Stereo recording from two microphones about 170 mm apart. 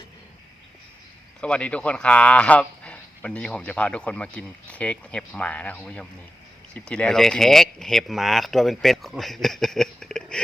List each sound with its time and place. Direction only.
1.4 s speech: 5° left (ahead or behind)